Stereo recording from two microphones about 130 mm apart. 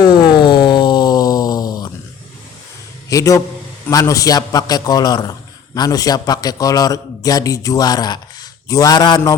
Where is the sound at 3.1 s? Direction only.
25° left (ahead or behind).